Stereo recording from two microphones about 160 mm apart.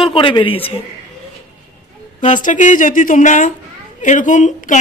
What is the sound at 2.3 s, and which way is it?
Speech, 50° left (ahead or behind).